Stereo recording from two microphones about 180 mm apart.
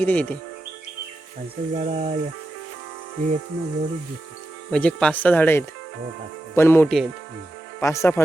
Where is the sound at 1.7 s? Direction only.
40° right (ahead or behind).